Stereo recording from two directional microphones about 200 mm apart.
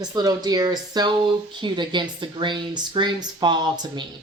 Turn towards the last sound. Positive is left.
turn(degrees=-20)  # may be behind; listen again after turning